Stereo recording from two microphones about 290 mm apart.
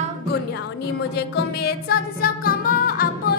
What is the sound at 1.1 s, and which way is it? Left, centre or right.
Music, left.